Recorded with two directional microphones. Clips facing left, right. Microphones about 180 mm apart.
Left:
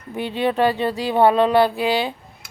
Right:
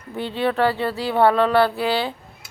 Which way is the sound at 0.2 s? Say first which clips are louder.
Left 1 dB; 15° left (ahead or behind).